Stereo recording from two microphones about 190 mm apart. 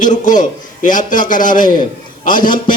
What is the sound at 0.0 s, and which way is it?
A man's voice, 45° left (ahead or behind).